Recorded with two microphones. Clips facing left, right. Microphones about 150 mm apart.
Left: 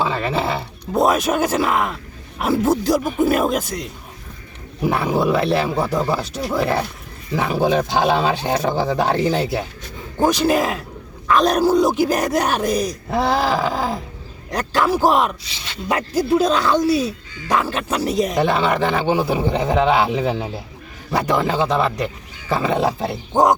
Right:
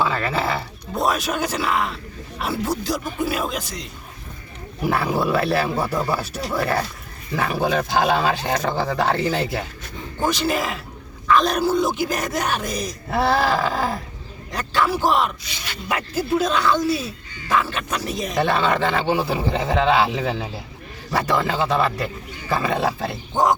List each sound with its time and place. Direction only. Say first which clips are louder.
0.0 s music: left 1 dB; 20° left (ahead or behind)
0.9 s speech: left 5 dB; 45° left (ahead or behind)
5.1 s speech: left 4 dB; 15° left (ahead or behind)
10.2 s speech: left 5 dB; 40° left (ahead or behind)
13.1 s a sound: left 1 dB; 15° left (ahead or behind)
14.5 s speech: left 3 dB; 40° left (ahead or behind)
15.4 s speech: left 4 dB; 25° left (ahead or behind)
16.0 s speech: left 4 dB; 40° left (ahead or behind)
18.3 s a sound: right 2 dB; 15° left (ahead or behind)
19.3 s speech: left 3 dB; 20° left (ahead or behind)
23.3 s speech: left 4 dB; 40° left (ahead or behind)